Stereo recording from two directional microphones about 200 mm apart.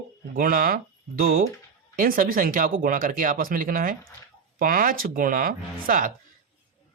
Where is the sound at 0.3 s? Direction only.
45° right (ahead or behind).